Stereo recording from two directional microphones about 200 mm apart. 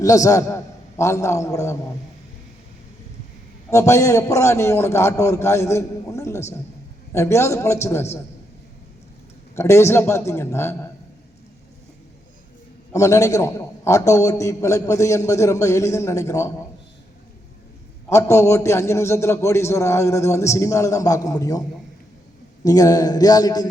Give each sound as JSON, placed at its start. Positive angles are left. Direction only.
{"t": 0.0, "sound": "a man's voice", "side_deg": 15}
{"t": 3.7, "sound": "a man's voice", "side_deg": 15}
{"t": 9.6, "sound": "a man's voice", "side_deg": 15}
{"t": 12.9, "sound": "a man's voice", "side_deg": 15}
{"t": 18.1, "sound": "a man's voice", "side_deg": 15}
{"t": 22.6, "sound": "speech", "side_deg": 15}